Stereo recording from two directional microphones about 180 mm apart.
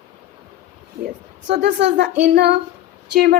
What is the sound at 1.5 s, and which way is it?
Speech, 75° right (ahead or behind).